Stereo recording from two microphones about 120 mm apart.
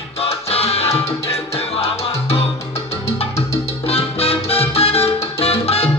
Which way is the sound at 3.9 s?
55° left (ahead or behind).